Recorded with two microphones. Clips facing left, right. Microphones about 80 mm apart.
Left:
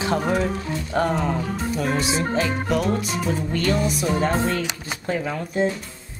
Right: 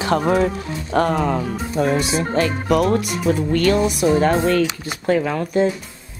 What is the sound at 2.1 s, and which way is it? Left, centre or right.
Music, right.